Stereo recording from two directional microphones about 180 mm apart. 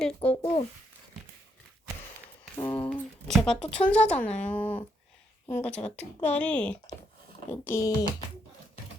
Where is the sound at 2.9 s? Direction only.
Centre (ahead or behind).